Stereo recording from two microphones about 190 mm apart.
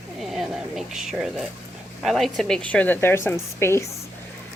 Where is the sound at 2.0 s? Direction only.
Centre (ahead or behind).